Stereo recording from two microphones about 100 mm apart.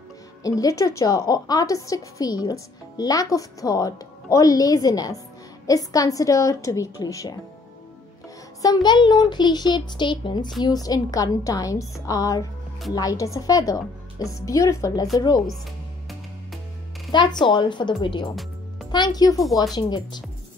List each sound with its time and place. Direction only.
0.4 s a woman's voice: 35° left (ahead or behind)
8.6 s a child's voice: 45° left (ahead or behind)
10.6 s a woman's voice: 40° left (ahead or behind)
17.1 s a child's voice: 50° left (ahead or behind)
18.3 s music: centre (ahead or behind)
18.9 s a woman's voice: 45° left (ahead or behind)